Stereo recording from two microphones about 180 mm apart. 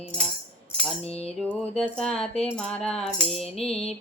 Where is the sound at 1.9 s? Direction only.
5° left (ahead or behind).